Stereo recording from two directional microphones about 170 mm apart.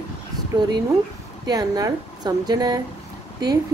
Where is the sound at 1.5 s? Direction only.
20° right (ahead or behind).